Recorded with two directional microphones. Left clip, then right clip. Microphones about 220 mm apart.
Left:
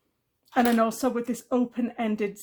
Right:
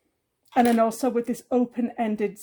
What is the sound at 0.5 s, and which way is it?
Speech, 20° right (ahead or behind).